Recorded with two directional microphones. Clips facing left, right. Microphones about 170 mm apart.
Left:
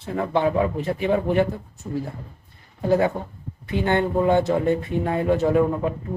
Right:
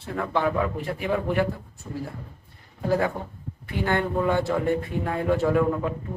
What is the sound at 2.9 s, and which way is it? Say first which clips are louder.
Speech: left 4 dB; 20° left (ahead or behind).